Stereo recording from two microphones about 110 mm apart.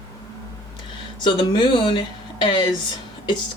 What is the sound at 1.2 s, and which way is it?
Speech, 50° left (ahead or behind).